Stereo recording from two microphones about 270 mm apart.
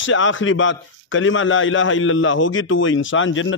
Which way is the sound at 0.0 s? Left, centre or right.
Left.